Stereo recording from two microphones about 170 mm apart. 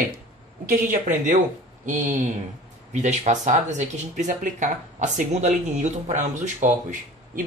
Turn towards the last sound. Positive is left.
turn(degrees=-45)  # may be behind; listen again after turning